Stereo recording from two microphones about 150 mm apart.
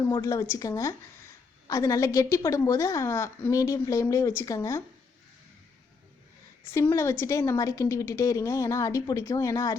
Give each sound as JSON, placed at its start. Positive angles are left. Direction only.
{"t": 0.0, "sound": "a woman's voice", "side_deg": 20}
{"t": 6.7, "sound": "a woman's voice", "side_deg": 20}